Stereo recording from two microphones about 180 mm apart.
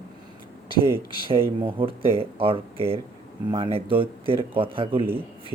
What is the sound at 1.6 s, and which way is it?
Speech, 30° right (ahead or behind).